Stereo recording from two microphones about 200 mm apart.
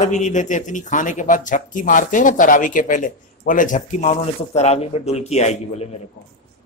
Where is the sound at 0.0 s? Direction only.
35° left (ahead or behind).